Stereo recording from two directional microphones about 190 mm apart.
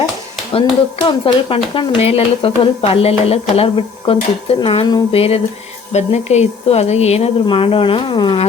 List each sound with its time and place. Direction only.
1.0 s speech: 30° left (ahead or behind)